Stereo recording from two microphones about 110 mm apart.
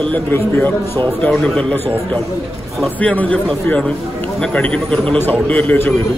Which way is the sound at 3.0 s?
15° left (ahead or behind).